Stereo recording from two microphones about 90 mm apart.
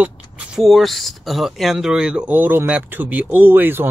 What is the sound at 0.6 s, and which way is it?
Speech, centre (ahead or behind).